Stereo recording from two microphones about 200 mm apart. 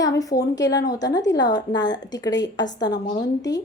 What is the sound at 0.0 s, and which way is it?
A woman's voice, 15° left (ahead or behind).